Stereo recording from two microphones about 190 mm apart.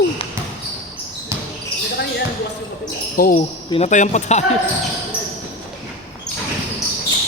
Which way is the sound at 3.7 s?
35° left (ahead or behind).